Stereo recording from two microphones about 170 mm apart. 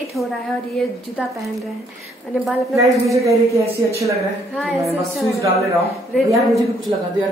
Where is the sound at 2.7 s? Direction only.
20° right (ahead or behind).